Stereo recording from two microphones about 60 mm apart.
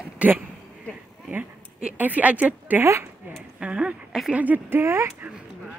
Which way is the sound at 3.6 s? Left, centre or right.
Centre.